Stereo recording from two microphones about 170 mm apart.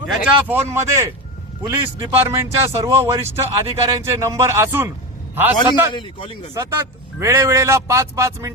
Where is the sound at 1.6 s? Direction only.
30° right (ahead or behind).